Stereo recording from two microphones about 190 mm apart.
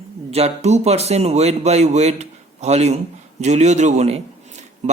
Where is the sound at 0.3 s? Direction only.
35° right (ahead or behind).